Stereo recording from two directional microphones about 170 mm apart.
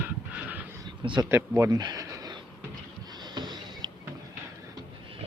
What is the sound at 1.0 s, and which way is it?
Speech, 30° right (ahead or behind).